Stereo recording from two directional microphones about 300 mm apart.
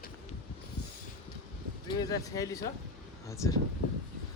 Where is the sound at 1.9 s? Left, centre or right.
Centre.